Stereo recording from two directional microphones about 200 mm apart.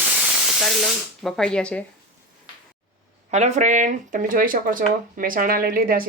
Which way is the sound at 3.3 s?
35° right (ahead or behind).